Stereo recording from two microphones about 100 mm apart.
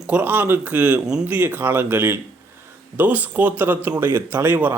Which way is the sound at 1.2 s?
15° right (ahead or behind).